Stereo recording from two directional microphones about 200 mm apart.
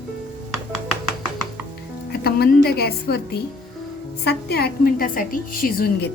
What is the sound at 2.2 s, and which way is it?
Speech, 50° left (ahead or behind).